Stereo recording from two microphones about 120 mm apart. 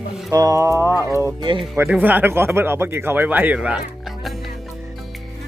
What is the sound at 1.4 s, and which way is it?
Speech, 45° right (ahead or behind).